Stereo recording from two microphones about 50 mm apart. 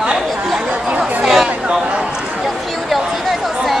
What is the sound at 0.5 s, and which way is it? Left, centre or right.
Chatter, centre.